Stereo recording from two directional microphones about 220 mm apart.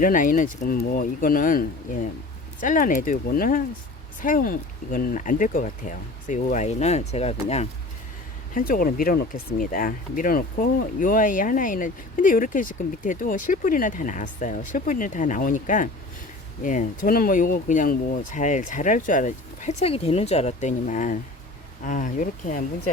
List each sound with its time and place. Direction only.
0.0 s speech: 35° left (ahead or behind)
8.5 s speech: 40° left (ahead or behind)